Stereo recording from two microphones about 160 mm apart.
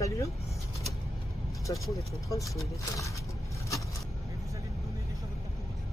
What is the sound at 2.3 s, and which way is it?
Speech, 20° left (ahead or behind).